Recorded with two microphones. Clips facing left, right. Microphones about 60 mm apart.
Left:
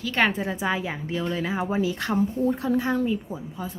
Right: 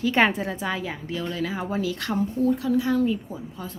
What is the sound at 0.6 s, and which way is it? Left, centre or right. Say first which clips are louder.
A woman's voice: left 2 dB; centre.